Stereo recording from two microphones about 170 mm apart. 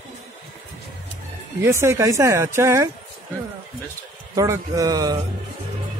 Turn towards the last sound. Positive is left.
turn(degrees=-20)  # may be behind; listen again after turning